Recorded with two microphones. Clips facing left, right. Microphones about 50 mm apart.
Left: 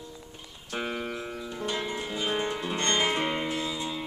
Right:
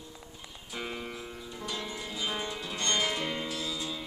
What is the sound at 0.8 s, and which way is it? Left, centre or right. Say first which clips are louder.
Music: left 5 dB; left.